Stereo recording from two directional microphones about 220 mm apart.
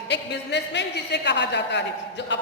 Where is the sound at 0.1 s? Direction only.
50° left (ahead or behind).